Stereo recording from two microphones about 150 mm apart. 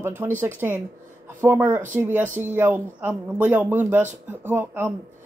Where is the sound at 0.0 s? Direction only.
15° right (ahead or behind).